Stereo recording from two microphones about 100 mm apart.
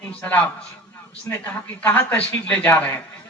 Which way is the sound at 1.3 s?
30° left (ahead or behind).